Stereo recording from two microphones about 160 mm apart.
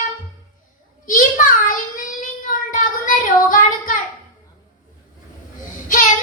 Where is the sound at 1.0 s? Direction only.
55° left (ahead or behind).